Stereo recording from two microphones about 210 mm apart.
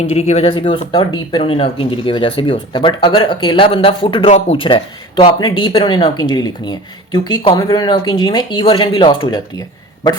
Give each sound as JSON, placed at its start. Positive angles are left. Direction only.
{"t": 0.0, "sound": "speech", "side_deg": 30}